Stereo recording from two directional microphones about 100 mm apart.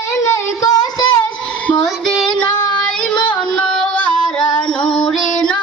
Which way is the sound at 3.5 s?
10° left (ahead or behind).